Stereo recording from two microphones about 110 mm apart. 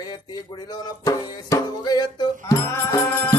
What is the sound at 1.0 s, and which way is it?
Music, 30° left (ahead or behind).